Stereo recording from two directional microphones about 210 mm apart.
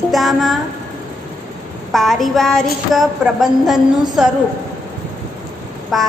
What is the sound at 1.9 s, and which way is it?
A woman's voice, centre (ahead or behind).